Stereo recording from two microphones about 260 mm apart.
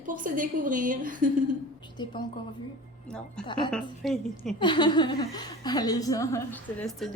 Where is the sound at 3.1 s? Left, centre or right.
Centre.